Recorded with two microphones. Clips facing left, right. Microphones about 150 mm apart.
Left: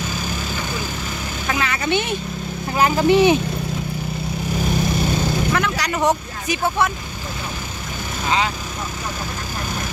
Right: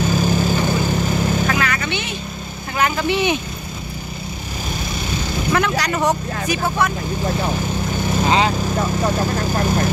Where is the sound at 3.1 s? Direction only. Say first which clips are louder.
Left 9 dB; 40° left (ahead or behind).